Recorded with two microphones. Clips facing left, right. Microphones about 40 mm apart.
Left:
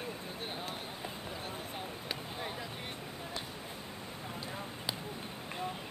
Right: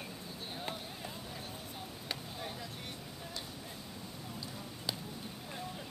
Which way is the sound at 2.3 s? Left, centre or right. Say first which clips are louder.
Left 3 dB; left.